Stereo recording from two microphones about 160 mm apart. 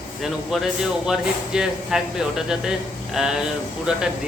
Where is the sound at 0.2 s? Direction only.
Centre (ahead or behind).